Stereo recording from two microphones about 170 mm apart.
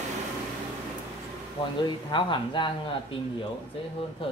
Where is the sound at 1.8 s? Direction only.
30° left (ahead or behind).